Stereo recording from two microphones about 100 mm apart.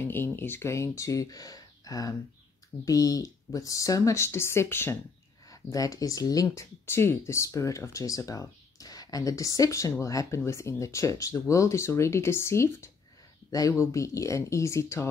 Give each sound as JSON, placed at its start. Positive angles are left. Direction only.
{"t": 0.0, "sound": "speech", "side_deg": 25}
{"t": 5.5, "sound": "speech", "side_deg": 35}